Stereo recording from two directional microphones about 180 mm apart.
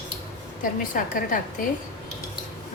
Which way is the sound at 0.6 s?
50° left (ahead or behind).